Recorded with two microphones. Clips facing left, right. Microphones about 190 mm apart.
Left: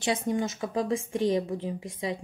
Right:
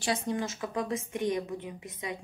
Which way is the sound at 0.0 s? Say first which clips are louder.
Left 3 dB; 20° left (ahead or behind).